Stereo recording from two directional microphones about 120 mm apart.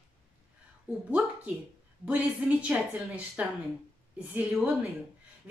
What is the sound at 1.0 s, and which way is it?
A woman's voice, 10° right (ahead or behind).